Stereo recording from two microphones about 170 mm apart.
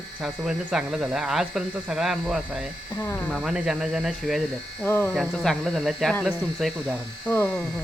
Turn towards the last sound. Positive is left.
turn(degrees=10)  # may be behind; listen again after turning